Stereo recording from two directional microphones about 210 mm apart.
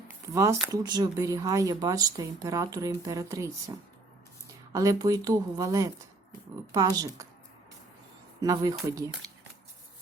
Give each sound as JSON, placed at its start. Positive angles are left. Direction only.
{"t": 0.1, "sound": "a sound", "side_deg": -15}
{"t": 0.7, "sound": "speech", "side_deg": -20}
{"t": 4.7, "sound": "speech", "side_deg": -15}
{"t": 8.4, "sound": "speech", "side_deg": -15}